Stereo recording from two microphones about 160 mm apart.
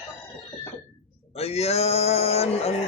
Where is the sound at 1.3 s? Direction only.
40° left (ahead or behind).